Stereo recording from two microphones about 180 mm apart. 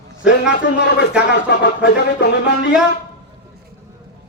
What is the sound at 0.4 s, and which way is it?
Music, 75° left (ahead or behind).